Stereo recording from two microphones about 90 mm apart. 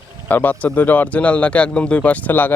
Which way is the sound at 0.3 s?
20° left (ahead or behind).